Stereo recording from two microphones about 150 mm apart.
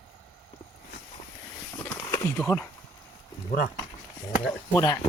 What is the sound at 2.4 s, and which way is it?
Speech, 10° left (ahead or behind).